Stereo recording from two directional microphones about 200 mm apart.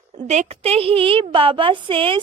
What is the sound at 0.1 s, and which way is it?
A woman's voice, 35° right (ahead or behind).